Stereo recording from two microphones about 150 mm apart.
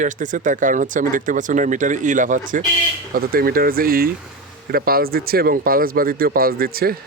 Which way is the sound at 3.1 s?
80° right.